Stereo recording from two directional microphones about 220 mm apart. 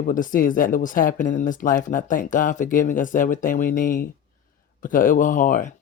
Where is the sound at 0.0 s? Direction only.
35° left (ahead or behind).